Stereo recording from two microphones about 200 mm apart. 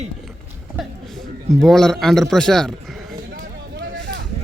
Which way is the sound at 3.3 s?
55° right (ahead or behind).